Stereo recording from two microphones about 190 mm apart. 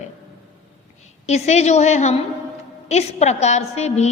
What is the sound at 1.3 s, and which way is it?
A woman's voice, 35° left (ahead or behind).